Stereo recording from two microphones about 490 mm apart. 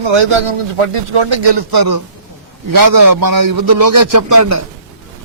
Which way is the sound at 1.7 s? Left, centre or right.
Right.